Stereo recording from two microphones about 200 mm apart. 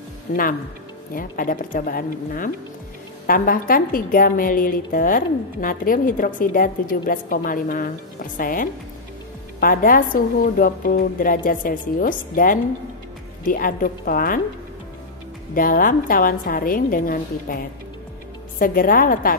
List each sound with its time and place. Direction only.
0.3 s a woman's voice: 45° left (ahead or behind)
15.5 s a woman's voice: 45° left (ahead or behind)